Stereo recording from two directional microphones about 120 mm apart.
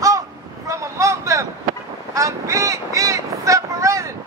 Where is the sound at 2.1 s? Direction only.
25° right (ahead or behind).